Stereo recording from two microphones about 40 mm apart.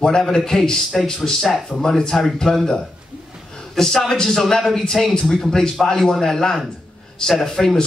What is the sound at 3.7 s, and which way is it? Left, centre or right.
A man's voice, centre.